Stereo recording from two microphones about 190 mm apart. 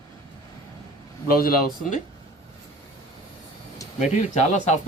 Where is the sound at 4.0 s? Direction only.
35° left (ahead or behind).